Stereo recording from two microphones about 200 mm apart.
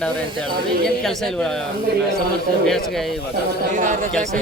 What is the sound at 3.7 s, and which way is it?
Speech, 40° right (ahead or behind).